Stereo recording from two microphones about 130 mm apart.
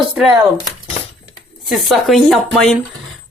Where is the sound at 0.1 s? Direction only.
10° right (ahead or behind).